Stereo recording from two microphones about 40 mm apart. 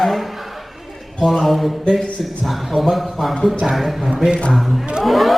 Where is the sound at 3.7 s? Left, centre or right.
Centre.